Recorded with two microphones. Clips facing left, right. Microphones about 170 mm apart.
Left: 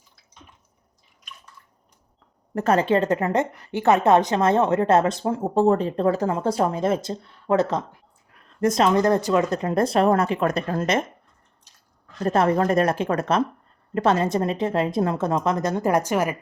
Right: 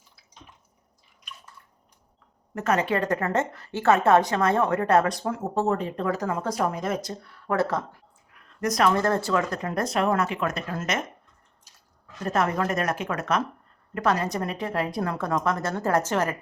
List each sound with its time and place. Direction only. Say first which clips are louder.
2.6 s a woman's voice: left 5 dB; 30° left (ahead or behind)
12.2 s a woman's voice: left 5 dB; 30° left (ahead or behind); by 16.3 s 10° left (ahead or behind)